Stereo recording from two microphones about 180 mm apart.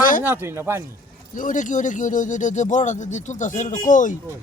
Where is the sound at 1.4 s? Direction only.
45° left (ahead or behind).